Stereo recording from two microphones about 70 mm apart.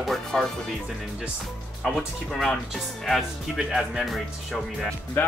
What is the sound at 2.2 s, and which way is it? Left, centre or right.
Speech, centre.